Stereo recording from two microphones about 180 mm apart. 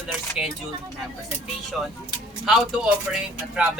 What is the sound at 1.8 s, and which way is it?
Speech, centre (ahead or behind).